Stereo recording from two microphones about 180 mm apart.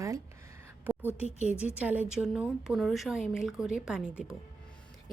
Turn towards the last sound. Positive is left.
turn(degrees=-5)  # may be behind; listen again after turning